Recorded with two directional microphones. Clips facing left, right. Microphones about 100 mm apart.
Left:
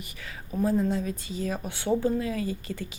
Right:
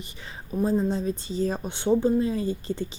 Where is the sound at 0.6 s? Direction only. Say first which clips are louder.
Right 1 dB; 25° right (ahead or behind).